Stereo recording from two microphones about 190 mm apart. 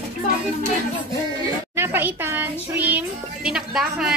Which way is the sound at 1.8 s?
10° right (ahead or behind).